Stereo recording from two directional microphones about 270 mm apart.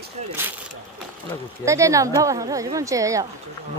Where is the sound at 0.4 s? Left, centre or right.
Centre.